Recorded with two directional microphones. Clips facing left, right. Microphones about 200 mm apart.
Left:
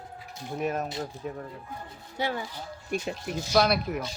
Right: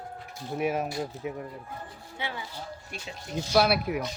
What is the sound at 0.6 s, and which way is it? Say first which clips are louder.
Speech: right 2 dB; 10° right (ahead or behind).